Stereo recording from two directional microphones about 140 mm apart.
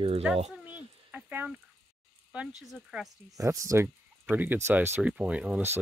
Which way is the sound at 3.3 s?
25° right (ahead or behind).